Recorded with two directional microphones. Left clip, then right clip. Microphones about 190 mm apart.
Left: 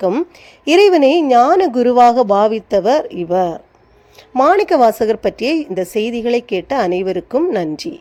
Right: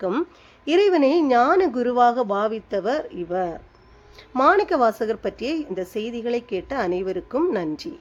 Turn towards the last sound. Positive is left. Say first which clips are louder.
# left 6 dB
turn(degrees=20)  # may be behind; listen again after turning